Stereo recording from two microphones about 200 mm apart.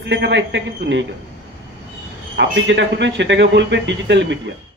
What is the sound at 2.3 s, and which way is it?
Speech, 60° right (ahead or behind).